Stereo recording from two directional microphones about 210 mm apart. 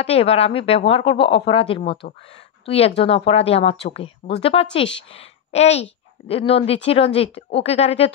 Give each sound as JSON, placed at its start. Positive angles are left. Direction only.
{"t": 0.0, "sound": "a woman's voice", "side_deg": 30}